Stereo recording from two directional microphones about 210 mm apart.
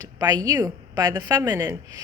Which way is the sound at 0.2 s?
20° right (ahead or behind).